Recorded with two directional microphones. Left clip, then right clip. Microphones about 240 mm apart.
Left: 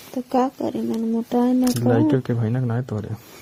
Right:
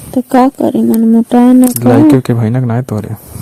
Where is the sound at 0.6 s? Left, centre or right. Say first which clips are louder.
Right 14 dB; right.